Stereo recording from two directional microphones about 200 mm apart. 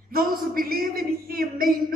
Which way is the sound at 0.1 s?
45° right (ahead or behind).